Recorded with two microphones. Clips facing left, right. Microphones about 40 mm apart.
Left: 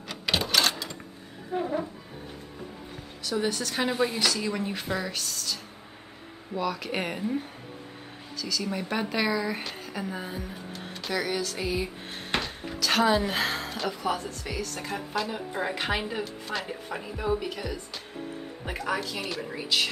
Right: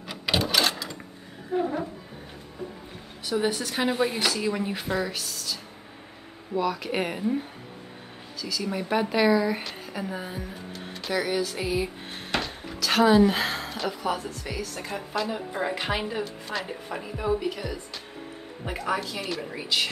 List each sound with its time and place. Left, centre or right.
0.5 s sewing machine: centre
1.5 s music: centre
3.3 s a woman's voice: centre
12.3 s music: left
12.7 s a woman's voice: centre
18.9 s a woman's voice: centre